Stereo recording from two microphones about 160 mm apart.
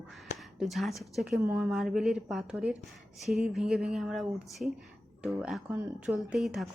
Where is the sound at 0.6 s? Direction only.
Centre (ahead or behind).